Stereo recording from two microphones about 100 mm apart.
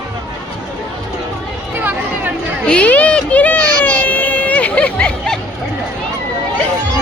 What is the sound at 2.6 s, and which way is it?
Baby cry, 15° left (ahead or behind).